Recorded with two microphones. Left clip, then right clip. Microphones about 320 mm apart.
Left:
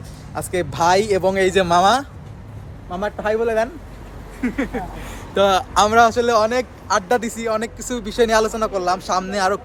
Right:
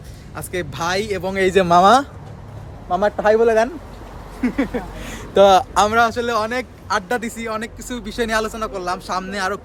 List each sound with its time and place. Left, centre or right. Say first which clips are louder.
0.3 s speech: left 4 dB; centre
1.4 s speech: right 5 dB; centre
4.4 s speech: right 2 dB; centre